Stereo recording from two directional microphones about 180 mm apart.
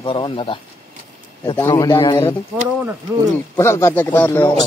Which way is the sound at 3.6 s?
15° left (ahead or behind).